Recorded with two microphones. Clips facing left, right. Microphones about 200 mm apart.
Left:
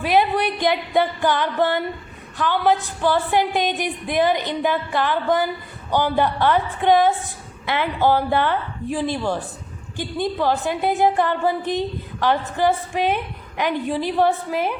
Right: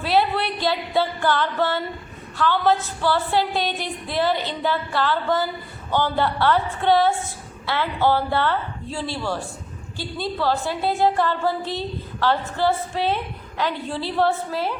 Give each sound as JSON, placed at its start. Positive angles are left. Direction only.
{"t": 0.0, "sound": "music", "side_deg": 15}
{"t": 2.4, "sound": "a woman's voice", "side_deg": 15}